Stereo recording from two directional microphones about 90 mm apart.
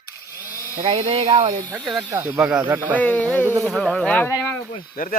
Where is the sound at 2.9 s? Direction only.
15° left (ahead or behind).